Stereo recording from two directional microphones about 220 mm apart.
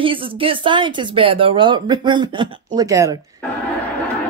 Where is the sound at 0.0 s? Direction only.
25° right (ahead or behind).